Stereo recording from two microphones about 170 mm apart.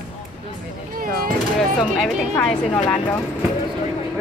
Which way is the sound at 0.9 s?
60° right (ahead or behind).